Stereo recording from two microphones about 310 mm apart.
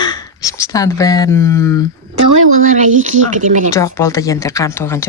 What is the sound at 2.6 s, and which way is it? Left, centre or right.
Speech, right.